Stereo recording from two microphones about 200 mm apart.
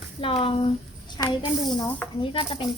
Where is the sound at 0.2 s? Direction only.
25° left (ahead or behind).